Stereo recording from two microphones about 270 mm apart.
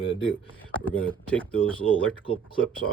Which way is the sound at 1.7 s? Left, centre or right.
Centre.